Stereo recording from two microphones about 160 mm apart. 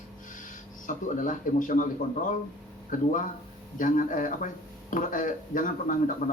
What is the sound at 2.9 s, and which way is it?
A man's voice, 55° left (ahead or behind).